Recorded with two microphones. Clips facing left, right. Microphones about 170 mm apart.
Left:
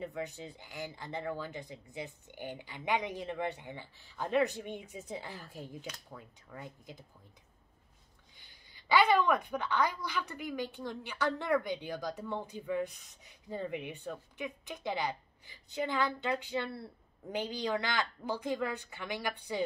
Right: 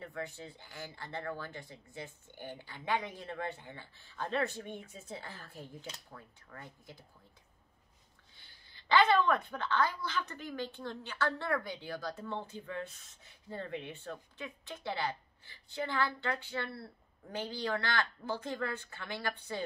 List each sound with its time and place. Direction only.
0.0 s a woman's voice: 20° left (ahead or behind)
8.4 s a woman's voice: 15° left (ahead or behind)